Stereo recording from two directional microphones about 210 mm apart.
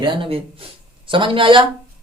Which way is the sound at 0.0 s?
25° right (ahead or behind).